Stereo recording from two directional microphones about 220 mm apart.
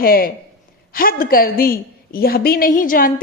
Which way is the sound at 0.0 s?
40° left (ahead or behind).